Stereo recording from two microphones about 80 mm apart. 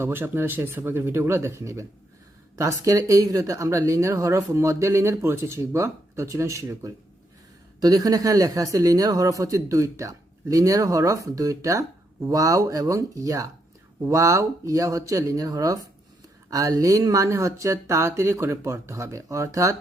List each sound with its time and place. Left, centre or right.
0.0 s speech: right